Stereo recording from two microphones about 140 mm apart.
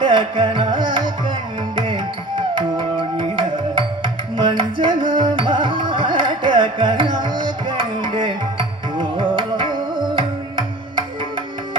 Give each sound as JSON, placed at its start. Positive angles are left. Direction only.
{"t": 0.0, "sound": "music", "side_deg": -35}